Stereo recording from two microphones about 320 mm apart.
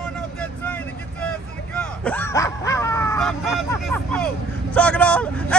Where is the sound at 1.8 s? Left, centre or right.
Centre.